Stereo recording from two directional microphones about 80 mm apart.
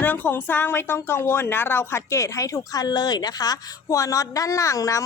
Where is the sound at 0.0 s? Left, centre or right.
Left.